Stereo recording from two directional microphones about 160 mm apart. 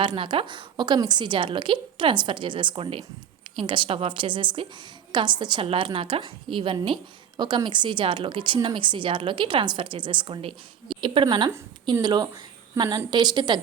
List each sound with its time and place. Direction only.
0.0 s a woman's voice: 30° right (ahead or behind)